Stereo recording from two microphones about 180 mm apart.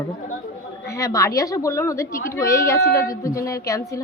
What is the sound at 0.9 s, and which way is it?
A woman's voice, 15° left (ahead or behind).